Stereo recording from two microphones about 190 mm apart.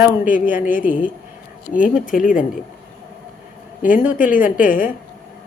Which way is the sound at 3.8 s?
45° left (ahead or behind).